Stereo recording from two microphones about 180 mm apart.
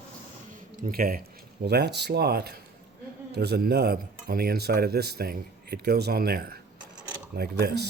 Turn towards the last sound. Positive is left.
turn(degrees=-65)  # may be behind; listen again after turning